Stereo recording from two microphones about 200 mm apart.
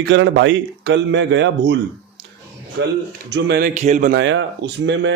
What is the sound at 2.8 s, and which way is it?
Speech, 65° right (ahead or behind).